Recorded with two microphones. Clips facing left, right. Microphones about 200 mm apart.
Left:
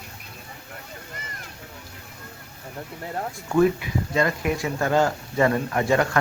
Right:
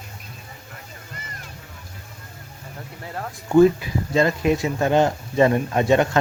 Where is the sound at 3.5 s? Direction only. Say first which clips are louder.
Right 5 dB; 30° right (ahead or behind).